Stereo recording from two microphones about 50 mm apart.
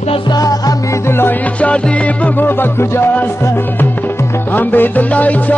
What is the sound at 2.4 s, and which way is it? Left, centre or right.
Music, left.